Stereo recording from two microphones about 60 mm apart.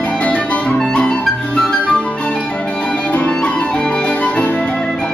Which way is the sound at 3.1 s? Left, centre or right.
Left.